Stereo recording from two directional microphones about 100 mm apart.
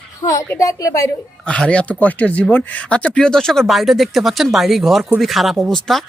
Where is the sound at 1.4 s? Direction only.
10° left (ahead or behind).